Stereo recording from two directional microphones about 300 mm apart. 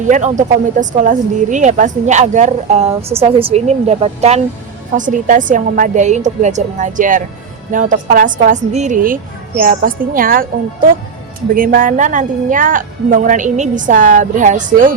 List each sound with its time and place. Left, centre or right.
0.1 s speech: right